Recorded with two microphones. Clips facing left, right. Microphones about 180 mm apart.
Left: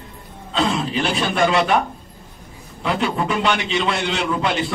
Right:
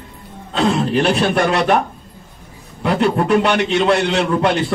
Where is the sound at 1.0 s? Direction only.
65° right (ahead or behind).